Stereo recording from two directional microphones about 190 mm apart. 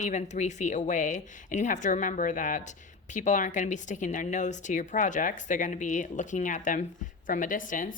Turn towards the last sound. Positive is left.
turn(degrees=45)  # may be behind; listen again after turning